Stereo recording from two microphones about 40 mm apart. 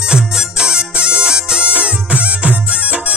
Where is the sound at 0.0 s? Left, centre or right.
Centre.